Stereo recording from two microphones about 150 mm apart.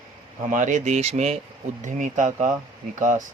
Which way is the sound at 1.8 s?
55° right (ahead or behind).